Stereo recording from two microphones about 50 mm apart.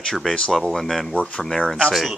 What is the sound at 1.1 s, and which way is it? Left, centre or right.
Speech, left.